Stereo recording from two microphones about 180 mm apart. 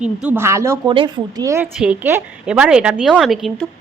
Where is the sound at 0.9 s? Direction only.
30° right (ahead or behind).